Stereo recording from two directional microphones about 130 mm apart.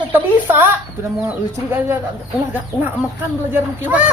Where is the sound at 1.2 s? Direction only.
15° right (ahead or behind).